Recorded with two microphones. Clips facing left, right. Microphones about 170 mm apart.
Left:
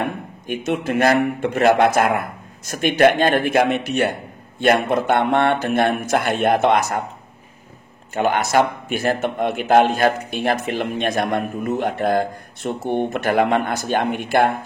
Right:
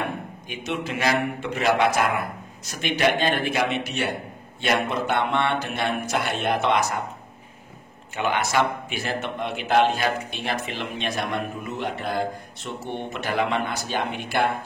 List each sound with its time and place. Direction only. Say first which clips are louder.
0.0 s a man's voice: left 4 dB; 50° left (ahead or behind)
8.1 s a man's voice: left 6 dB; 45° left (ahead or behind)